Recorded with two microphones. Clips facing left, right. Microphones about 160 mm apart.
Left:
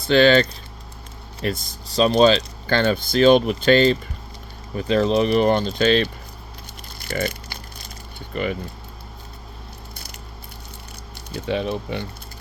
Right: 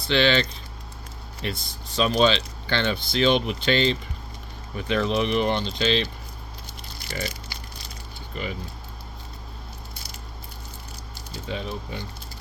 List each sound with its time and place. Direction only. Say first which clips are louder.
0.1 s speech: left 7 dB; 45° left (ahead or behind)
4.8 s speech: left 5 dB; 35° left (ahead or behind); by 6.1 s 50° left (ahead or behind)
7.0 s a sound: left 7 dB; 55° left (ahead or behind)
8.3 s speech: left 8 dB; 60° left (ahead or behind)
11.3 s speech: left 8 dB; 70° left (ahead or behind)